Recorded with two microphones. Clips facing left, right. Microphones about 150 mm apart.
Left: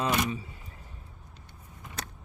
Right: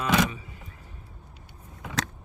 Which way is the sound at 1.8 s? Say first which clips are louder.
Right 10 dB; 90° right.